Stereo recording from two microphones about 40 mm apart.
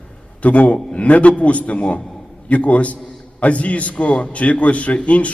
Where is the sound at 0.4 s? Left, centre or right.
Left.